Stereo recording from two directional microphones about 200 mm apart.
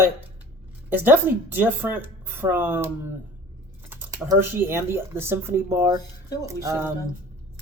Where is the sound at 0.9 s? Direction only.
10° right (ahead or behind).